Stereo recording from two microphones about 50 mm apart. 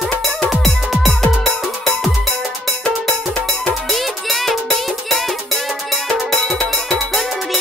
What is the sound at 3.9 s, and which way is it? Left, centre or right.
Music, centre.